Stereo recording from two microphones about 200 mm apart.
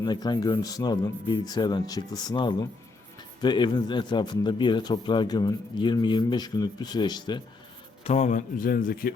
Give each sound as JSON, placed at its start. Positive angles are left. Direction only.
{"t": 0.0, "sound": "a man's voice", "side_deg": 20}
{"t": 8.0, "sound": "speech", "side_deg": 35}